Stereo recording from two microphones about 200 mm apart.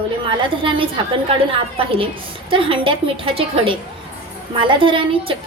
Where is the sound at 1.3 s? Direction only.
25° right (ahead or behind).